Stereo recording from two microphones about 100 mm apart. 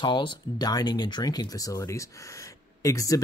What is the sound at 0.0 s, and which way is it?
Speech, 50° left (ahead or behind).